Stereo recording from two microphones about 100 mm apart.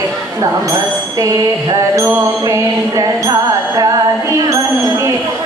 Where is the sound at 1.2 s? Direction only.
35° right (ahead or behind).